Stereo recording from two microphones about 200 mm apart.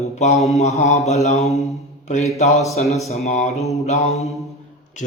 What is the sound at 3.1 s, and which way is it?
Speech, 35° left (ahead or behind).